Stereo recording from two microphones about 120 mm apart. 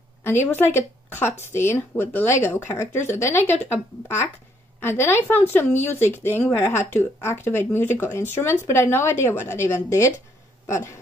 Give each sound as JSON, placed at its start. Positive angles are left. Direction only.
{"t": 0.2, "sound": "speech", "side_deg": 20}